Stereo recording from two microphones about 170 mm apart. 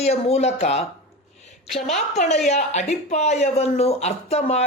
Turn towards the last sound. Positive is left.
turn(degrees=40)  # may be behind; listen again after turning